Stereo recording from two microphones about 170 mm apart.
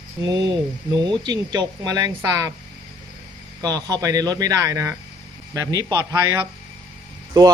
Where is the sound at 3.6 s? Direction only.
20° right (ahead or behind).